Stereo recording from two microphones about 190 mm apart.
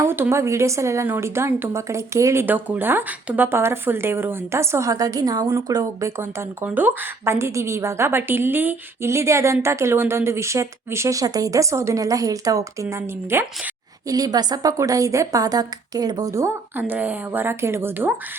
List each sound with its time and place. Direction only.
0.0 s speech: 15° right (ahead or behind)